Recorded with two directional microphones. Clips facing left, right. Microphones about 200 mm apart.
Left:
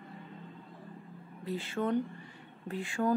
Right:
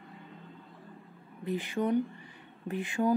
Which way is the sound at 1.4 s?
20° right (ahead or behind).